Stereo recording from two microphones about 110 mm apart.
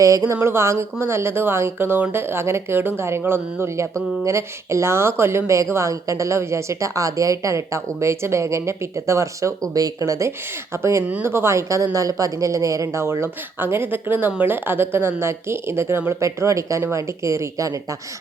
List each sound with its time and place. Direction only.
0.0 s speech: 30° right (ahead or behind)